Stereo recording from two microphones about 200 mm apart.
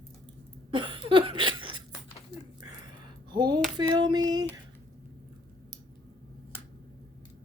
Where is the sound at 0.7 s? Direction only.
25° right (ahead or behind).